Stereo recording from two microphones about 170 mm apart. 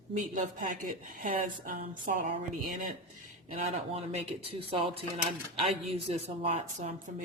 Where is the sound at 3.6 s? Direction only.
40° right (ahead or behind).